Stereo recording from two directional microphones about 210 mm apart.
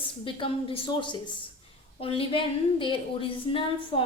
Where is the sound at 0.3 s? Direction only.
25° left (ahead or behind).